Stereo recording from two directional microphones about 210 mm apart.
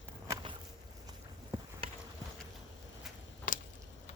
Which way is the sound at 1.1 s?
25° right (ahead or behind).